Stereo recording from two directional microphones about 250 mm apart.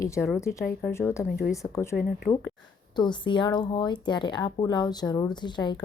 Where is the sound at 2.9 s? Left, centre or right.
Centre.